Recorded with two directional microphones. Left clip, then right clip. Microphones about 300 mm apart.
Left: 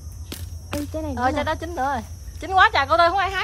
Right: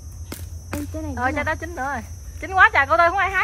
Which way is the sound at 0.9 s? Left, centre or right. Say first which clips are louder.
Left 3 dB; left.